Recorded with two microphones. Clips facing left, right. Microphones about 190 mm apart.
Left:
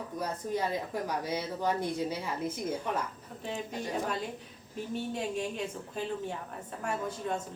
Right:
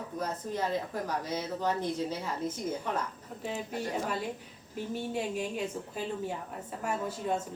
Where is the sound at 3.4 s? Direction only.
5° right (ahead or behind).